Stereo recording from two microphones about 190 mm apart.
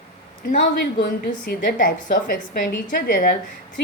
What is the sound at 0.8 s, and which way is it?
Speech, 60° left (ahead or behind).